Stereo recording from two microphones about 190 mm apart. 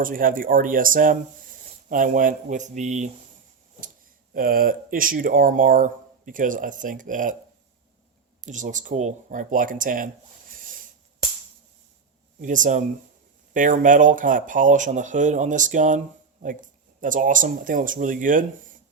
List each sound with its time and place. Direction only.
0.0 s speech: 45° right (ahead or behind)
4.4 s speech: 50° right (ahead or behind)
8.4 s speech: 40° right (ahead or behind)
12.4 s speech: 45° right (ahead or behind)